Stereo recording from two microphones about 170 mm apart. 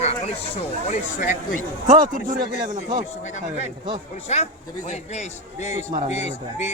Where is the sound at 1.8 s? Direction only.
50° right (ahead or behind).